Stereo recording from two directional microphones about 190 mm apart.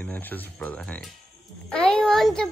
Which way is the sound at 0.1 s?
10° left (ahead or behind).